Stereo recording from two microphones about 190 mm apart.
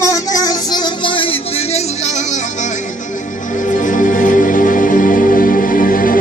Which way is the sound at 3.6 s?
45° left (ahead or behind).